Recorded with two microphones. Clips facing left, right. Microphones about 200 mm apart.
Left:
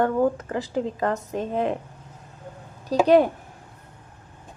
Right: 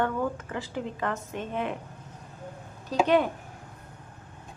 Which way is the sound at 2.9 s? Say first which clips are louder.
Left 6 dB; 40° left (ahead or behind).